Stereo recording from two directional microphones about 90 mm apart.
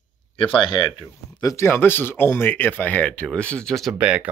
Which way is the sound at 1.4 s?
40° left (ahead or behind).